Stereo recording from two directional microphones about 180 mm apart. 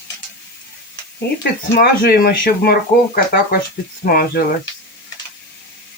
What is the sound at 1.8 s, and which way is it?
Speech, 55° left (ahead or behind).